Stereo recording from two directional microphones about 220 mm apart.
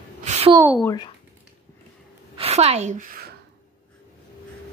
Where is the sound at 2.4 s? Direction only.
30° right (ahead or behind).